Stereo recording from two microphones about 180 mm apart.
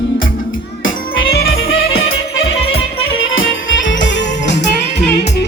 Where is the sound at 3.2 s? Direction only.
90° left.